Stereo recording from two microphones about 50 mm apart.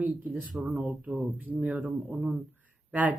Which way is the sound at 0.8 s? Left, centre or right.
Centre.